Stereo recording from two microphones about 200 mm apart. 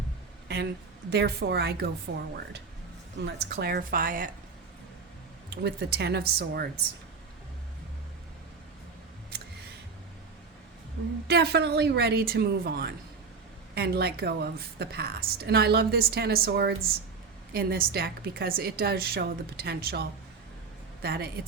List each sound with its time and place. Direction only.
0.4 s a sound: 55° right (ahead or behind)
1.1 s a woman's voice: 55° right (ahead or behind)
3.2 s speech: 55° right (ahead or behind)
5.6 s speech: 55° right (ahead or behind)
11.3 s speech: 55° right (ahead or behind)